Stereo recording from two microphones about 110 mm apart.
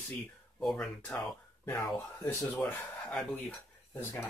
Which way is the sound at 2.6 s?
20° left (ahead or behind).